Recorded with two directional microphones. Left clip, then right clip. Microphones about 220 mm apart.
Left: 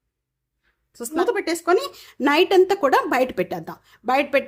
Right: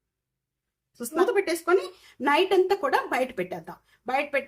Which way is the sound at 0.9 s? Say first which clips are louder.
Left 2 dB; 35° left (ahead or behind).